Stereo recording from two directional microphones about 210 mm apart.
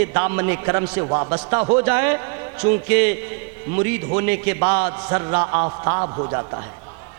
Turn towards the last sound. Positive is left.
turn(degrees=-25)  # may be behind; listen again after turning